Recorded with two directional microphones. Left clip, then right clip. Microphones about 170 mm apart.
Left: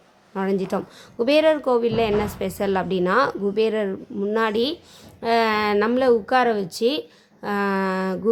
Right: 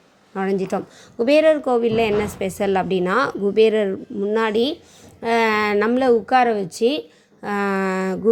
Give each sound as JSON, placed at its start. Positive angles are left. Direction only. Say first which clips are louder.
{"t": 0.3, "sound": "a woman's voice", "louder": "right 2 dB", "side_deg": -10}